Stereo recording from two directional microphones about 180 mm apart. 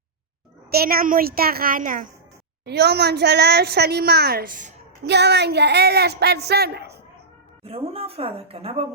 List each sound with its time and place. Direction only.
0.7 s a woman's voice: 60° right (ahead or behind)
2.6 s a woman's voice: 65° right (ahead or behind); by 4.7 s 50° right (ahead or behind)
5.0 s a woman's voice: 70° right (ahead or behind)
7.6 s a woman's voice: 30° right (ahead or behind)